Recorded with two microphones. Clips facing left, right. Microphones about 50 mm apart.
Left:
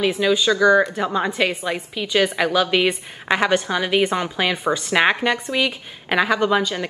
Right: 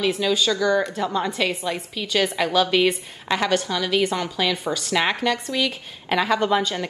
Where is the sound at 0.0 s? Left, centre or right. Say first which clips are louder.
Left 3 dB; left.